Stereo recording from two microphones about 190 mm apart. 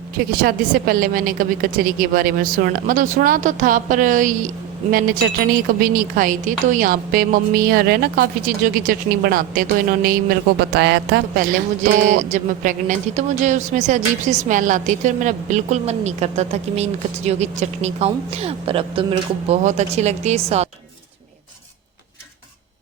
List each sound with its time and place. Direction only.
0.4 s a woman's voice: 50° right (ahead or behind); by 20.7 s 35° right (ahead or behind)